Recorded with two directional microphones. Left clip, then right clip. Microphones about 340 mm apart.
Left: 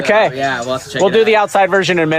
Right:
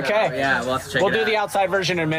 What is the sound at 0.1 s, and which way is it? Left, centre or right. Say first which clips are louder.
Speech: left 7 dB; left.